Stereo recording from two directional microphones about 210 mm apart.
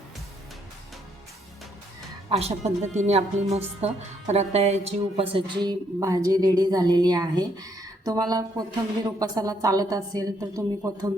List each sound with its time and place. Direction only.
2.3 s a woman's voice: 30° right (ahead or behind)